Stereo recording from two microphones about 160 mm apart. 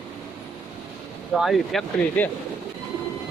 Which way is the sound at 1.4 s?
Centre (ahead or behind).